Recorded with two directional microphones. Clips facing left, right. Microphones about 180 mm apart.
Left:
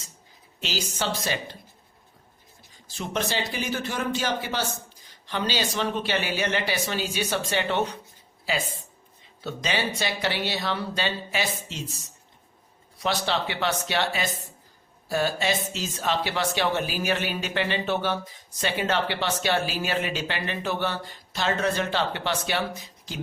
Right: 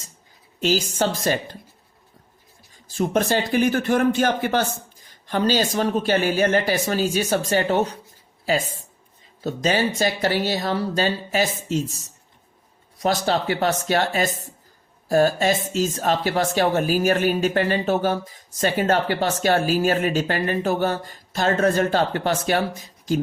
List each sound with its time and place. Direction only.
0.6 s speech: 45° right (ahead or behind)
2.9 s speech: 45° right (ahead or behind)